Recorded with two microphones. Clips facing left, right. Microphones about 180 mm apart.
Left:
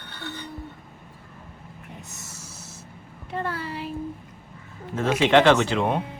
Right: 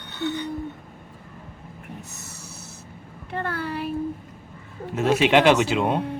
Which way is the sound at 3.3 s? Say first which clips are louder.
Right 1 dB; 60° right (ahead or behind).